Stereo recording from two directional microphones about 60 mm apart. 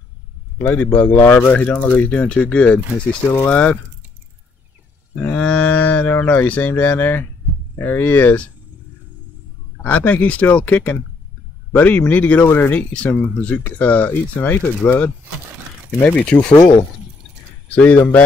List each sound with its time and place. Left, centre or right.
0.7 s speech: left
5.2 s speech: left
9.8 s speech: left
16.0 s speech: left
17.6 s speech: left